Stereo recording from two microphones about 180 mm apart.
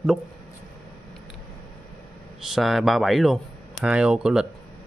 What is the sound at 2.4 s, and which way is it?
Speech, centre (ahead or behind).